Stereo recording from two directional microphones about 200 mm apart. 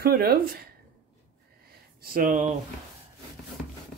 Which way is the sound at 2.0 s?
45° right (ahead or behind).